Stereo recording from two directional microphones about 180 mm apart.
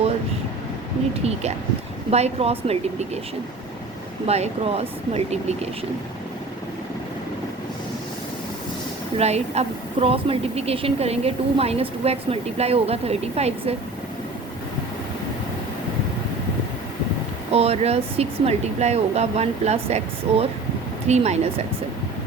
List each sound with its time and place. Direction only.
1.2 s a woman's voice: 35° right (ahead or behind)
4.3 s a woman's voice: 35° right (ahead or behind)
9.1 s a woman's voice: 35° right (ahead or behind)
17.5 s a woman's voice: 35° right (ahead or behind)